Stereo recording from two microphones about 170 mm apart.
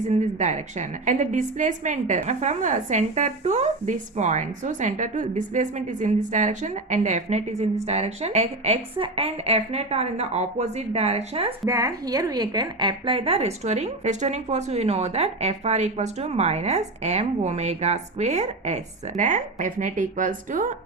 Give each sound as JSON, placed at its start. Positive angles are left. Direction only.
{"t": 0.3, "sound": "a woman's voice", "side_deg": -45}
{"t": 11.6, "sound": "a woman's voice", "side_deg": -20}